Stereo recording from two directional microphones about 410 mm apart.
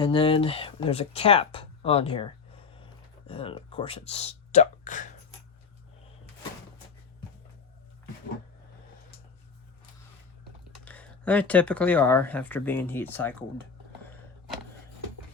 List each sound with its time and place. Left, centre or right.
0.0 s speech: centre
10.8 s speech: centre